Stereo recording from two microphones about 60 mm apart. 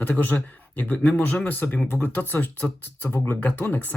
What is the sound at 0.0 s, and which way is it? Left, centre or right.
A man's voice, left.